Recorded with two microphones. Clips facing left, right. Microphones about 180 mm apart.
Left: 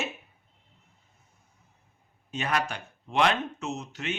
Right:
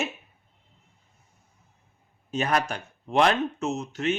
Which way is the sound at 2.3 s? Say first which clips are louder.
Right 4 dB; 40° right (ahead or behind).